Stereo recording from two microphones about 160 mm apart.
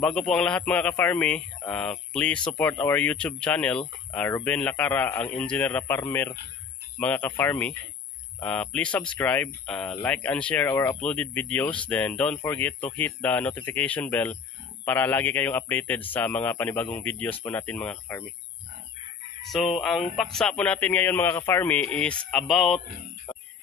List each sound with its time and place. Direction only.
0.0 s speech: 5° left (ahead or behind)
19.8 s speech: centre (ahead or behind)